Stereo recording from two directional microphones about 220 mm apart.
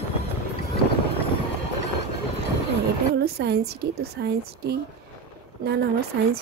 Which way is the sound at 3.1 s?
45° right (ahead or behind).